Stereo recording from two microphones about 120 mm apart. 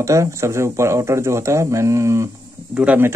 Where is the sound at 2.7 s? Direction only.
10° right (ahead or behind).